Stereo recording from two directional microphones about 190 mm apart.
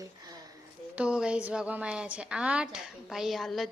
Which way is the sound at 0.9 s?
5° right (ahead or behind).